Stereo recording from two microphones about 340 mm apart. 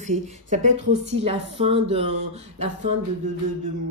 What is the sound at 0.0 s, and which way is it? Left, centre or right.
Speech, right.